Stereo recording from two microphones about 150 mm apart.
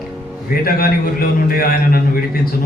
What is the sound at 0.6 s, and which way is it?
A man's voice, 75° left (ahead or behind).